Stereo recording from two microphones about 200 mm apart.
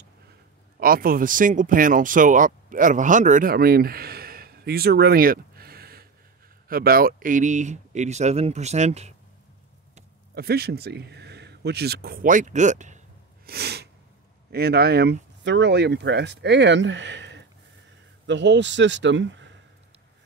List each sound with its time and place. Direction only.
0.7 s speech: 45° right (ahead or behind)
10.3 s speech: 50° right (ahead or behind)
13.5 s sneeze: 55° right (ahead or behind)
14.5 s speech: 50° right (ahead or behind)